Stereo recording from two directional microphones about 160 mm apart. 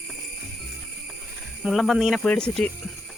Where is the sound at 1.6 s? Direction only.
Centre (ahead or behind).